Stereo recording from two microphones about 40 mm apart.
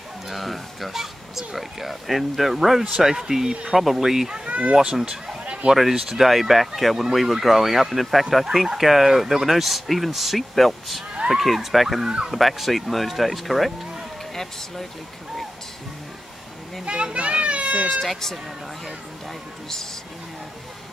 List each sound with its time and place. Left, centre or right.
0.3 s speech: centre
4.5 s speech: right
5.0 s speech: centre
5.4 s a sound: right
5.8 s speech: centre
12.0 s fowl: right
12.3 s speech: centre
16.8 s children playing: right
17.8 s speech: centre